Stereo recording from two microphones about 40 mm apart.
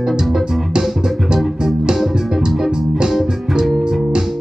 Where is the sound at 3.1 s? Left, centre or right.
Centre.